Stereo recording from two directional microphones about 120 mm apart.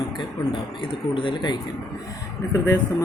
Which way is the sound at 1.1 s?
40° left (ahead or behind).